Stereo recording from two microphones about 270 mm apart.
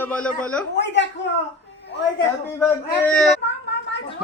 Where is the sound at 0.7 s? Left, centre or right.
Left.